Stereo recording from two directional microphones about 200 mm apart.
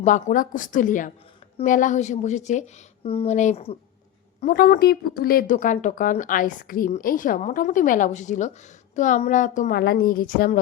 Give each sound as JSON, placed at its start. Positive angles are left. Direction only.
{"t": 0.0, "sound": "speech", "side_deg": 40}
{"t": 4.4, "sound": "a woman's voice", "side_deg": 45}